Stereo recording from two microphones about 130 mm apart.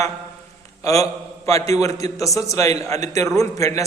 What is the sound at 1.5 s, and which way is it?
Speech, 50° right (ahead or behind).